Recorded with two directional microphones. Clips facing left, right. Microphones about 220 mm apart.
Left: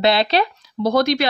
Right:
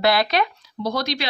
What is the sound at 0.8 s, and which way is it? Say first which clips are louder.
Speech: left 8 dB; 50° left (ahead or behind).